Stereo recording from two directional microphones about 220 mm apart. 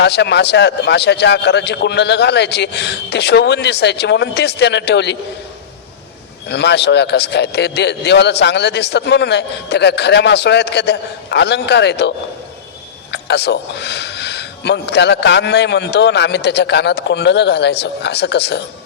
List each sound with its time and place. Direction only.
0.0 s a man's voice: 50° left (ahead or behind)
6.5 s a man's voice: 50° left (ahead or behind)